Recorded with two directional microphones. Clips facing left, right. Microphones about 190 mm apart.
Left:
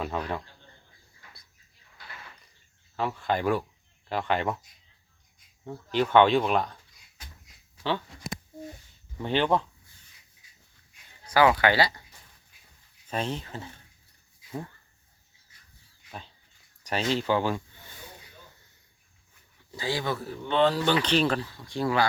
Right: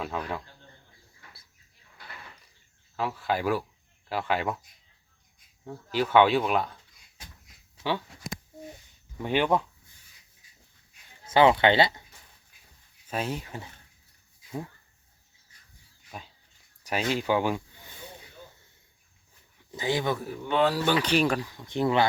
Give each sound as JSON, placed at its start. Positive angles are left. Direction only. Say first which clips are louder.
{"t": 0.1, "sound": "speech", "louder": "left 1 dB", "side_deg": 0}
{"t": 2.9, "sound": "speech", "louder": "left 1 dB", "side_deg": 0}
{"t": 5.6, "sound": "speech", "louder": "left 2 dB", "side_deg": -5}
{"t": 9.1, "sound": "speech", "louder": "even", "side_deg": -10}
{"t": 11.3, "sound": "speech", "louder": "right 2 dB", "side_deg": -25}
{"t": 13.1, "sound": "speech", "louder": "even", "side_deg": -5}
{"t": 16.8, "sound": "speech", "louder": "left 1 dB", "side_deg": -10}
{"t": 19.7, "sound": "speech", "louder": "right 2 dB", "side_deg": -20}